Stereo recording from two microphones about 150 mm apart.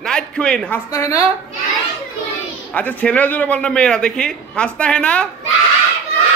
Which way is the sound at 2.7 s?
10° left (ahead or behind).